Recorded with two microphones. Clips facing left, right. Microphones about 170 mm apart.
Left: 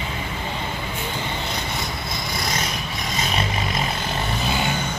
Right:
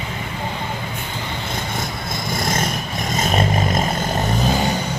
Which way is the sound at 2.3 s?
50° right (ahead or behind).